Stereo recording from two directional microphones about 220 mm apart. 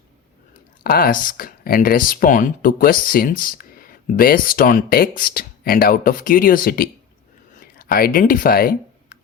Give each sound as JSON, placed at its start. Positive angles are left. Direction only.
{"t": 0.9, "sound": "speech", "side_deg": 40}